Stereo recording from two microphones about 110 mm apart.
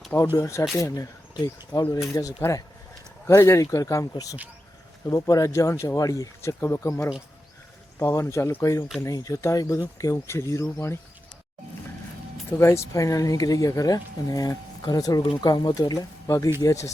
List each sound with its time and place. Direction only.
0.3 s speech: 30° left (ahead or behind)
2.1 s speech: 25° left (ahead or behind)
12.5 s speech: 25° left (ahead or behind)